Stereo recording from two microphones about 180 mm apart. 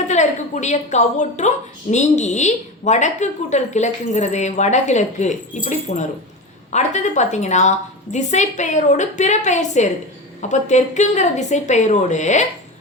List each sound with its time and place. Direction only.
0.1 s a woman's voice: 40° left (ahead or behind)